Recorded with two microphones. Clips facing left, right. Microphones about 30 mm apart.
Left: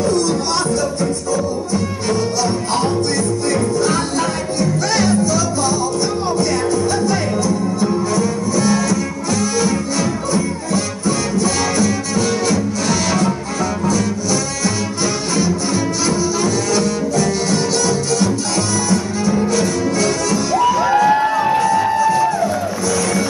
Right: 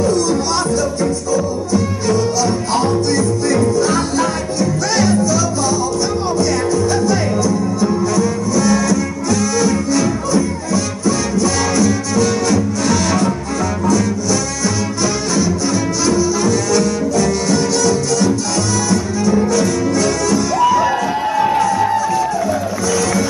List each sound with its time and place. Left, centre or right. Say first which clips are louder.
1.3 s music: right 2 dB; left
2.8 s music: right 3 dB; centre
11.1 s music: right 2 dB; left
11.8 s music: right 2 dB; centre
16.1 s music: right 5 dB; centre
19.5 s music: right 2 dB; centre